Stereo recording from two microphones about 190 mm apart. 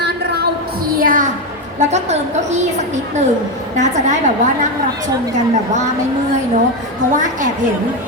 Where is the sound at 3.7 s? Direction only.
40° right (ahead or behind).